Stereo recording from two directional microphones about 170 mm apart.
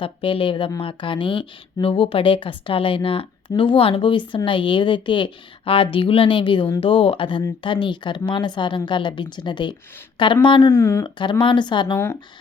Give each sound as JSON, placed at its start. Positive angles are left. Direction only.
{"t": 0.0, "sound": "a woman's voice", "side_deg": 30}
{"t": 10.7, "sound": "speech", "side_deg": 15}
{"t": 11.0, "sound": "a woman's voice", "side_deg": 30}